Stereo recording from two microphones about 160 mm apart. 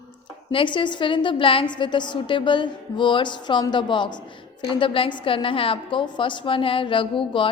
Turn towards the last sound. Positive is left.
turn(degrees=30)  # may be behind; listen again after turning